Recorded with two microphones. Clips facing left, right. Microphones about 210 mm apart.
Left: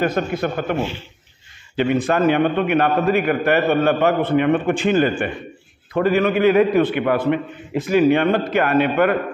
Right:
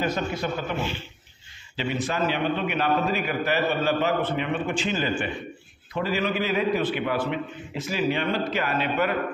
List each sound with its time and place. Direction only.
0.0 s a man's voice: 55° left (ahead or behind)
1.8 s a man's voice: 55° left (ahead or behind)